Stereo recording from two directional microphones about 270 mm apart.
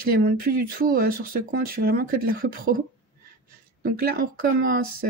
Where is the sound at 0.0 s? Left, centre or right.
Right.